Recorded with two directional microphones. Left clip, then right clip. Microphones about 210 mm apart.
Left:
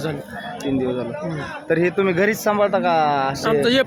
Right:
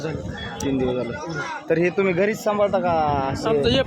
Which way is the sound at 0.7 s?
Centre (ahead or behind).